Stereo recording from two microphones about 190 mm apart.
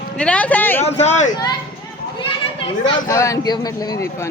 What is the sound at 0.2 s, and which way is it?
Speech, 5° left (ahead or behind).